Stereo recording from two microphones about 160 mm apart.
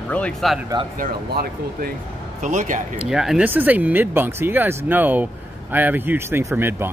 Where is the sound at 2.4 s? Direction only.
50° right (ahead or behind).